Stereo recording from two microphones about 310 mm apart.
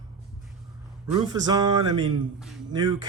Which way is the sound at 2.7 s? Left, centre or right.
Centre.